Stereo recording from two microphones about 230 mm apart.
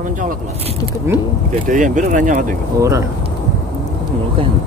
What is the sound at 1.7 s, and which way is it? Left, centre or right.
Speech, right.